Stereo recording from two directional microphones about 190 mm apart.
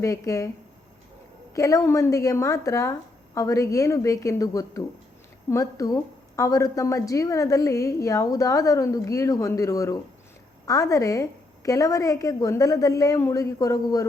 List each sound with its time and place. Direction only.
0.0 s a woman's voice: 15° left (ahead or behind)
1.5 s a woman's voice: 15° left (ahead or behind)